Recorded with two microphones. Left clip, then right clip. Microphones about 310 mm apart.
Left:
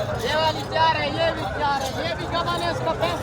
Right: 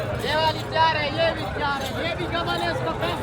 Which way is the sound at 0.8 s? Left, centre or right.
Left.